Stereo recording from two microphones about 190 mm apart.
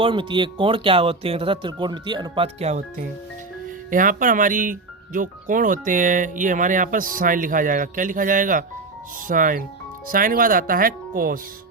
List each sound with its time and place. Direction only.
0.0 s speech: 25° right (ahead or behind); by 11.3 s 50° right (ahead or behind)